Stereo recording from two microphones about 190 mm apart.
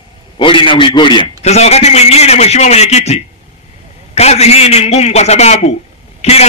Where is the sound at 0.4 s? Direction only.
25° left (ahead or behind).